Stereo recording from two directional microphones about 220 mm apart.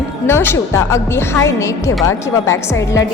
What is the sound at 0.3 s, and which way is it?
A woman's voice, 10° left (ahead or behind).